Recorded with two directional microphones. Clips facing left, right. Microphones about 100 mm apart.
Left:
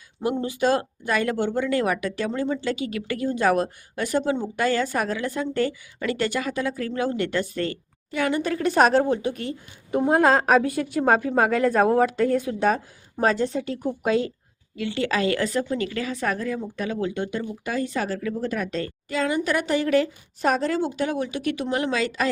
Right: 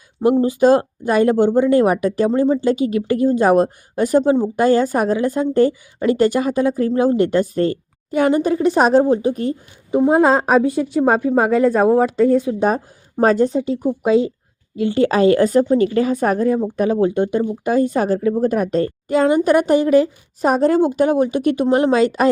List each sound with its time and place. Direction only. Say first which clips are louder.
0.2 s speech: right 10 dB; 40° right (ahead or behind)
8.6 s speech: right 4 dB; 25° right (ahead or behind)
10.1 s speech: right 3 dB; 20° right (ahead or behind)
11.0 s speech: right 4 dB; 15° right (ahead or behind)
11.5 s speech: right 6 dB; 5° right (ahead or behind)
12.6 s speech: right 4 dB; 40° right (ahead or behind)
13.8 s speech: right 7 dB; 25° right (ahead or behind)
14.8 s speech: right 9 dB; 40° right (ahead or behind)
19.9 s speech: right 7 dB; 30° right (ahead or behind)
20.6 s speech: right 10 dB; 50° right (ahead or behind)